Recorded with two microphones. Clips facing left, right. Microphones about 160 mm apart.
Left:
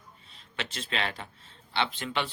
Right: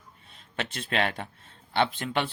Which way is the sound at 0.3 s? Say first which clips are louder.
Right 3 dB; 50° right (ahead or behind).